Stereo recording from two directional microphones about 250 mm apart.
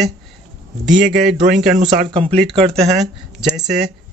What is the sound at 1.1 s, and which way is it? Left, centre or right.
Speech, centre.